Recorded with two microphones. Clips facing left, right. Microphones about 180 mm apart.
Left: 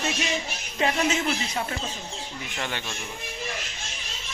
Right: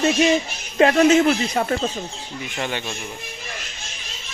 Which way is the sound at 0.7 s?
65° right (ahead or behind).